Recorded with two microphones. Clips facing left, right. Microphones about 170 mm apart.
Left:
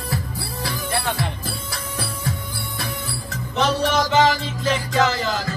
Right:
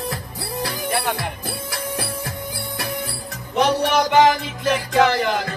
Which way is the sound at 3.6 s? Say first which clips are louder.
Right 2 dB; 10° right (ahead or behind).